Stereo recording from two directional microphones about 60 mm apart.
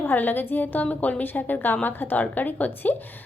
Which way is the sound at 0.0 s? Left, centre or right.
Left.